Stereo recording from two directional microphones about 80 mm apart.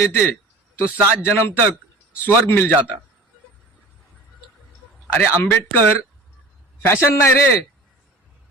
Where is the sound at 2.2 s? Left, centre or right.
Left.